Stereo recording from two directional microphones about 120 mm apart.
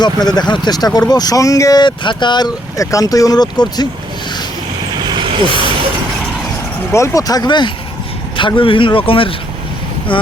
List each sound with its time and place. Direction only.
0.0 s speech: 35° left (ahead or behind)
5.0 s vehicle: 40° right (ahead or behind)
6.9 s speech: 25° left (ahead or behind); by 10.3 s 45° left (ahead or behind)